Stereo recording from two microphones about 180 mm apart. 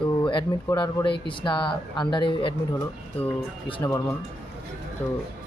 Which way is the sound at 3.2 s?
10° left (ahead or behind).